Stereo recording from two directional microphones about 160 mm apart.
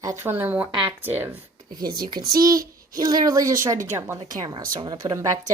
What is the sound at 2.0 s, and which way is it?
A woman's voice, 25° right (ahead or behind).